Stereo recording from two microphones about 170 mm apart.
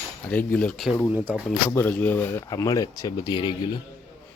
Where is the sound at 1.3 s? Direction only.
10° left (ahead or behind).